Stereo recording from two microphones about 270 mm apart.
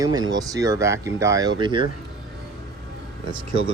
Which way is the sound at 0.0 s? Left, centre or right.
Centre.